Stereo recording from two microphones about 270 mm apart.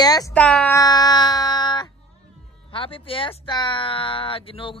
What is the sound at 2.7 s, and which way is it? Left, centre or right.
Speech, centre.